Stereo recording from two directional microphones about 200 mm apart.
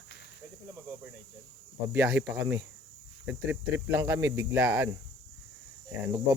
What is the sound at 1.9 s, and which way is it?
Speech, 5° right (ahead or behind).